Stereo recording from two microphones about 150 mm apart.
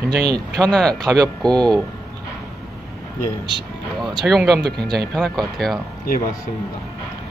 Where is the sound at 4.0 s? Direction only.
Centre (ahead or behind).